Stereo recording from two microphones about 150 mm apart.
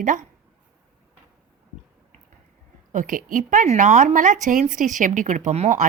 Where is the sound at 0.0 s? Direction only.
55° right (ahead or behind).